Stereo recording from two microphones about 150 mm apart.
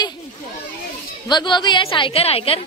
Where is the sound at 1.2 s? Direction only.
30° left (ahead or behind).